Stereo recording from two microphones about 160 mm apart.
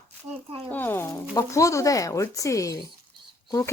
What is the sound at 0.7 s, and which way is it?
Speech, 15° left (ahead or behind).